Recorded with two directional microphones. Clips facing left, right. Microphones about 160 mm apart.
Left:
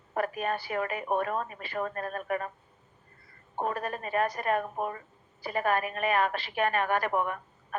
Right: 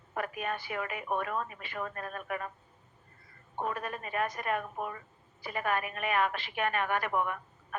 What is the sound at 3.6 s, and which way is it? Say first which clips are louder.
A woman's voice: left 3 dB; 40° left (ahead or behind).